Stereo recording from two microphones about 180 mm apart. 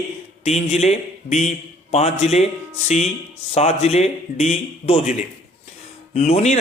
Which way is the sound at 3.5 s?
35° left (ahead or behind).